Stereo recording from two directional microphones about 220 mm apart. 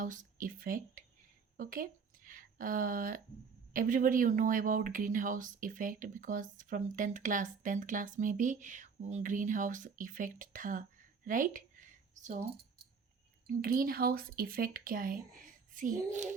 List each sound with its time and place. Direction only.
0.0 s speech: 35° right (ahead or behind)
13.5 s speech: 40° right (ahead or behind)